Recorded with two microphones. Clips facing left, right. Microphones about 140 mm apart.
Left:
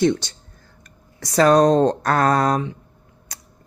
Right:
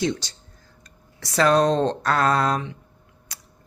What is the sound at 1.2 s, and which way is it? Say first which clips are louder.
Speech: left 4 dB; 40° left (ahead or behind).